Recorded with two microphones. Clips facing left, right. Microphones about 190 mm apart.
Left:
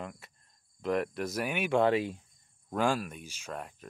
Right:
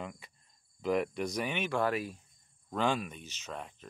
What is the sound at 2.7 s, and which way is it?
Speech, 5° left (ahead or behind).